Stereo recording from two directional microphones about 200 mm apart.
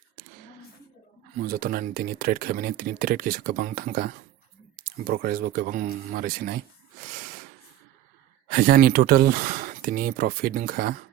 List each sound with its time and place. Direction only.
1.5 s speech: 45° right (ahead or behind)
8.4 s speech: 45° right (ahead or behind)